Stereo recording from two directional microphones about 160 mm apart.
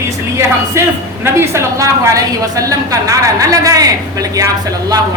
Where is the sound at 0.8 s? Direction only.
20° right (ahead or behind).